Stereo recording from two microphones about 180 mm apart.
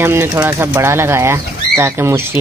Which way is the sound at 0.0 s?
15° right (ahead or behind).